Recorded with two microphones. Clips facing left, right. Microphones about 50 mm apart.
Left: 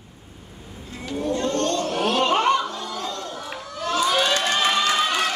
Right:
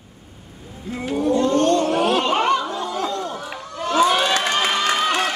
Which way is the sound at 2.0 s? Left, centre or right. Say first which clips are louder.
Right 1 dB; centre.